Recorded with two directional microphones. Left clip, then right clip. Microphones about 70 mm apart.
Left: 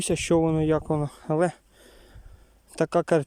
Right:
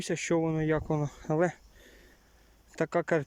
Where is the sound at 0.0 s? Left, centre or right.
Left.